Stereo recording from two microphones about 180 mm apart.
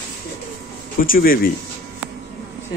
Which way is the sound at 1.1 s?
55° left (ahead or behind).